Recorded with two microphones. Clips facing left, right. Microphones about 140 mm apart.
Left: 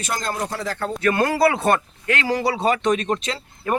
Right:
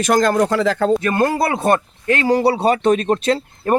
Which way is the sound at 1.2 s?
20° right (ahead or behind).